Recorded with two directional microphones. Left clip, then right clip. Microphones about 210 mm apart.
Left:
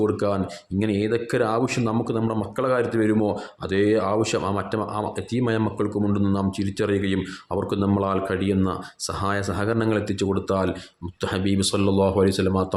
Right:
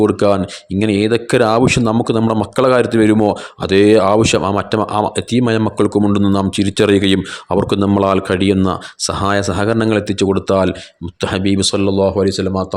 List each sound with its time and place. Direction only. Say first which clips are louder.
0.0 s speech: right 10 dB; 35° right (ahead or behind); by 12.6 s 20° right (ahead or behind)